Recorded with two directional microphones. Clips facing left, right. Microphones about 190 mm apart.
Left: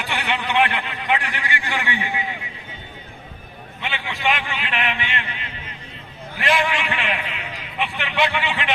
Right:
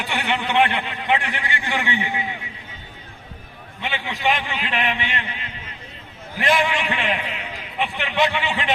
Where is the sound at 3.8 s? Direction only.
20° right (ahead or behind).